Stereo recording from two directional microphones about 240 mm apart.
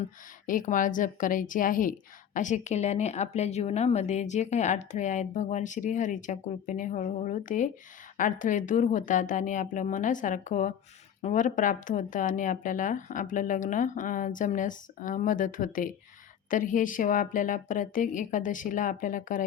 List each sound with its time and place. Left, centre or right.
0.4 s a woman's voice: left